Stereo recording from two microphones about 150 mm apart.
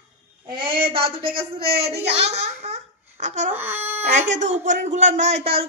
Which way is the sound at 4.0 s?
50° right (ahead or behind).